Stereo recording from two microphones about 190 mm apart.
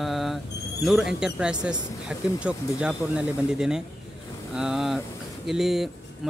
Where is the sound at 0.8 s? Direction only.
Centre (ahead or behind).